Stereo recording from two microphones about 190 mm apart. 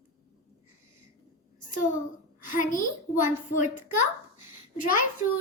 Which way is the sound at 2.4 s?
45° left (ahead or behind).